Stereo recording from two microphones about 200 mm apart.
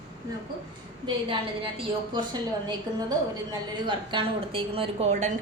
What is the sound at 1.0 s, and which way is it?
A woman's voice, 25° right (ahead or behind).